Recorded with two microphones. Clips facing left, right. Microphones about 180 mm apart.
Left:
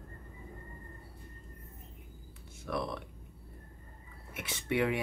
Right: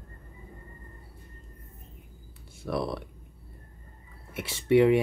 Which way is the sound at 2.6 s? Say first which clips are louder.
Right 5 dB; 35° right (ahead or behind).